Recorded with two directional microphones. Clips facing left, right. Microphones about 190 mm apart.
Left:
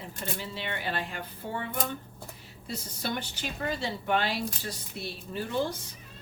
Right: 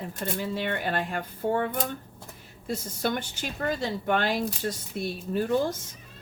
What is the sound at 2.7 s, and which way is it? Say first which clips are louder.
A woman's voice: right 5 dB; 50° right (ahead or behind).